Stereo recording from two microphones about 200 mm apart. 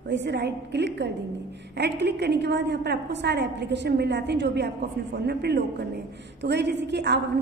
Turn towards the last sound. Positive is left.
turn(degrees=-55)  # may be behind; listen again after turning